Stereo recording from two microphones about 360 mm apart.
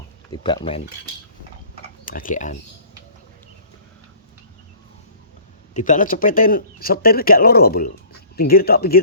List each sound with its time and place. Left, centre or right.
0.3 s speech: centre
2.0 s speech: left
5.7 s speech: left